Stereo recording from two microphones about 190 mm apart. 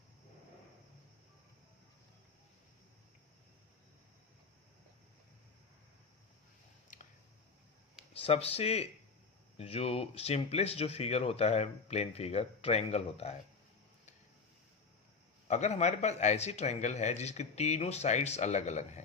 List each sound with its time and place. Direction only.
6.9 s a sound: 40° left (ahead or behind)
8.1 s speech: 30° left (ahead or behind)
15.4 s speech: 35° left (ahead or behind)